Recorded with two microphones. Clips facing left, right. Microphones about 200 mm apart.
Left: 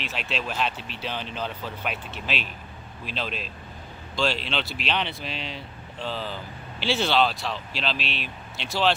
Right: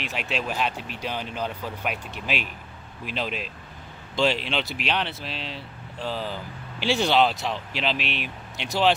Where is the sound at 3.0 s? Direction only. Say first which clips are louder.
Right 2 dB; 15° right (ahead or behind).